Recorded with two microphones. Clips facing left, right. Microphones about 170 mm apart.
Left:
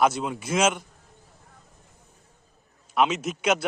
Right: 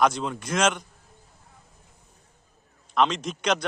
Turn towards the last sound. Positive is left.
turn(degrees=5)  # may be behind; listen again after turning